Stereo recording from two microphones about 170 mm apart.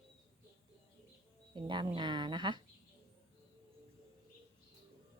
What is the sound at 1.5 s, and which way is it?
A woman's voice, 30° right (ahead or behind).